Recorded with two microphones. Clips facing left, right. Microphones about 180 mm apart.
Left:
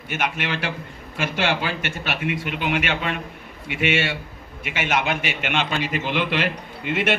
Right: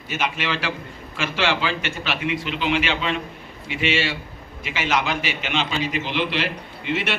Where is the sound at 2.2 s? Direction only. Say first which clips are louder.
Right 1 dB; 55° left (ahead or behind).